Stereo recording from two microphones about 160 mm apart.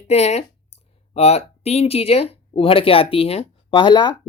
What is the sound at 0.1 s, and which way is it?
Speech, 45° left (ahead or behind).